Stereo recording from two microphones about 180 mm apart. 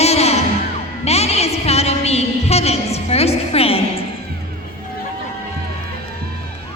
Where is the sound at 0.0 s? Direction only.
35° left (ahead or behind).